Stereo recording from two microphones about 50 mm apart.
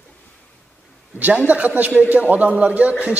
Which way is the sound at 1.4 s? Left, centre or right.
Right.